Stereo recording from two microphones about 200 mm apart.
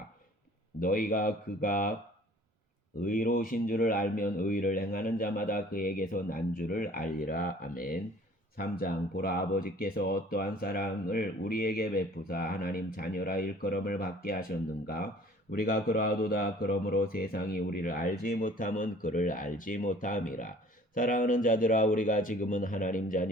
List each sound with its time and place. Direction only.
0.8 s speech: 45° left (ahead or behind)
3.0 s speech: 45° left (ahead or behind)
15.5 s speech: 45° left (ahead or behind)